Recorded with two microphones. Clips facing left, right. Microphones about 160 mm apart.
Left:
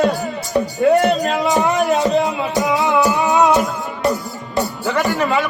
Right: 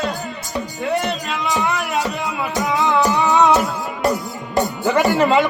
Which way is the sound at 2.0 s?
25° left (ahead or behind).